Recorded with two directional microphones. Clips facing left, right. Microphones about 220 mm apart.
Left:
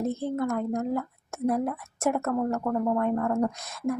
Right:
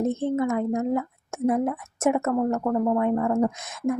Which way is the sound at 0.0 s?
20° right (ahead or behind).